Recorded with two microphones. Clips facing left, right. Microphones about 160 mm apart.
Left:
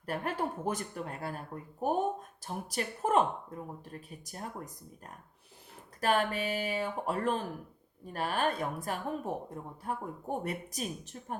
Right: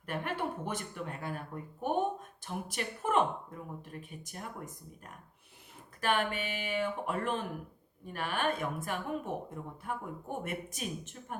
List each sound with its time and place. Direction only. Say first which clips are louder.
0.0 s speech: left 2 dB; 40° left (ahead or behind)